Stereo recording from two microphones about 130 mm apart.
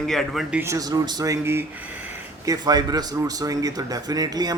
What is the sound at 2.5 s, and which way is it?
Speech, 30° right (ahead or behind).